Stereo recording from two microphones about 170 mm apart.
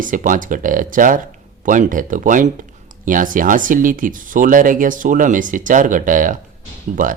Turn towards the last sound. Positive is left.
turn(degrees=-50)  # may be behind; listen again after turning